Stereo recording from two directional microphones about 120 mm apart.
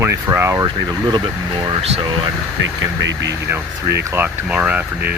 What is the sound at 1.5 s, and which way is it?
Speech, 45° right (ahead or behind).